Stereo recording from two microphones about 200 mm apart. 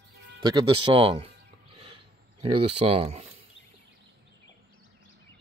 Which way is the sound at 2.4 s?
25° right (ahead or behind).